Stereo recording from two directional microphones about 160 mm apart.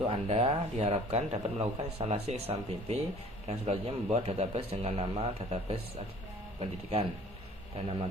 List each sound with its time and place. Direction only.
0.0 s a man's voice: 35° right (ahead or behind)